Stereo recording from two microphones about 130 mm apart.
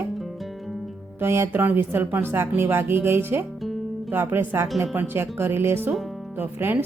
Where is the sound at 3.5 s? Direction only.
Centre (ahead or behind).